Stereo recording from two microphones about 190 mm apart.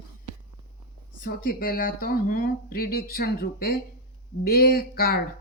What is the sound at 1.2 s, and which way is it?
Speech, 45° left (ahead or behind).